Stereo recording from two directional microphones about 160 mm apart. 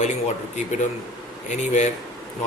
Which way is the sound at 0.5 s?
50° left (ahead or behind).